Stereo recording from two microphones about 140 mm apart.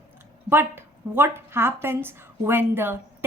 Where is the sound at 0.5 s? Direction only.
15° right (ahead or behind).